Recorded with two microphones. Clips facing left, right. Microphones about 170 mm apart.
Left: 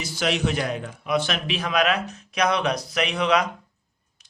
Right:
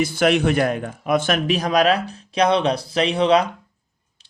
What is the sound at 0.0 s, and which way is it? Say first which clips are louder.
A man's voice: right 7 dB; 55° right (ahead or behind).